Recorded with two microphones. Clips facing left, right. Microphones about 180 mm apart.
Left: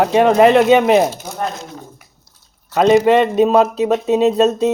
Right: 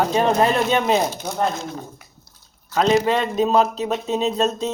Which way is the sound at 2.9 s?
65° left (ahead or behind).